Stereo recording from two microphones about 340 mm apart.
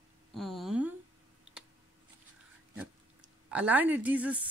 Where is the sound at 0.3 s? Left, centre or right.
Centre.